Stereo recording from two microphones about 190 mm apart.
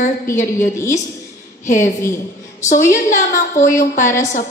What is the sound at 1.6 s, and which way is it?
A woman's voice, 40° left (ahead or behind).